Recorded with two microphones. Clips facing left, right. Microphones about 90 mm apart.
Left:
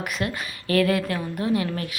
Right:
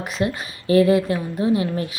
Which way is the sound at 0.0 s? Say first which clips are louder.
Right 4 dB; 30° right (ahead or behind).